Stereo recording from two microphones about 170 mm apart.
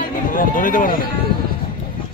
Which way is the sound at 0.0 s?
55° left (ahead or behind).